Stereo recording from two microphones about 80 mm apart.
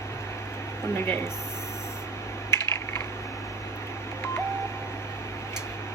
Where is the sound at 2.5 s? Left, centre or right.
Left.